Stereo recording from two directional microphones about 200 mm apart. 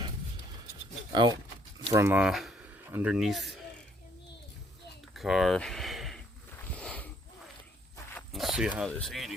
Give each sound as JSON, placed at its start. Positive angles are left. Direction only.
{"t": 1.1, "sound": "speech", "side_deg": -20}
{"t": 5.1, "sound": "a sound", "side_deg": 0}
{"t": 8.1, "sound": "speech", "side_deg": 0}